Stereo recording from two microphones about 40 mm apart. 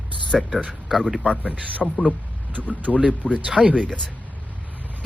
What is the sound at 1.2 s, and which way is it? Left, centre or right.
Speech, left.